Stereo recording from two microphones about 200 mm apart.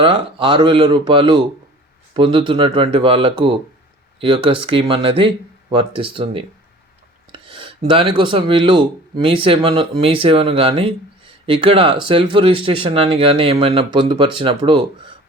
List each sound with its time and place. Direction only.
0.0 s speech: 25° right (ahead or behind)